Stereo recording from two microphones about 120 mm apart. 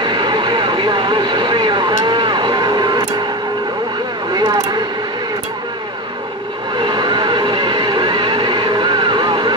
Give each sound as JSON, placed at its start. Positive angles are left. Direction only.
{"t": 0.0, "sound": "vehicle", "side_deg": -40}
{"t": 4.3, "sound": "a sound", "side_deg": -35}
{"t": 6.8, "sound": "vehicle", "side_deg": -40}